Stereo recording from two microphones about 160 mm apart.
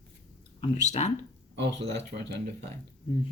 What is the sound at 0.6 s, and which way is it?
Speech, 45° left (ahead or behind).